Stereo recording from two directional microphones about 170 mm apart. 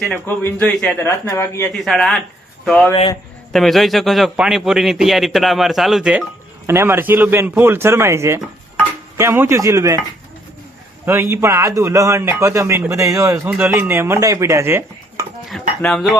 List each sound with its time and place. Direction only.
0.0 s a man's voice: 10° left (ahead or behind)
1.0 s a man's voice: 15° left (ahead or behind)
1.7 s a man's voice: centre (ahead or behind)
2.9 s a man's voice: 30° left (ahead or behind)
3.5 s a man's voice: centre (ahead or behind); by 10.0 s 20° right (ahead or behind)
11.0 s a man's voice: 15° right (ahead or behind)
15.4 s a man's voice: centre (ahead or behind)